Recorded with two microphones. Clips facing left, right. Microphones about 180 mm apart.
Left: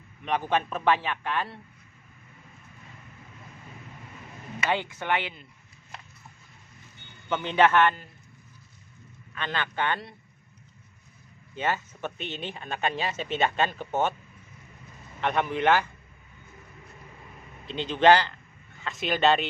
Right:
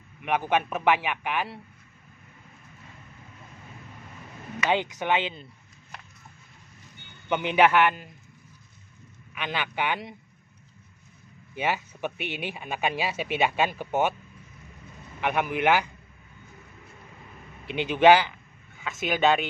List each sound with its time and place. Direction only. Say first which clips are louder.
0.2 s speech: right 1 dB; 10° right (ahead or behind)
4.6 s speech: right 3 dB; 15° right (ahead or behind)
7.2 s speech: right 1 dB; 15° right (ahead or behind)
9.3 s speech: even; 10° right (ahead or behind)
11.5 s speech: right 1 dB; 10° right (ahead or behind)
15.1 s speech: even; 10° right (ahead or behind)
17.6 s speech: right 2 dB; 15° right (ahead or behind)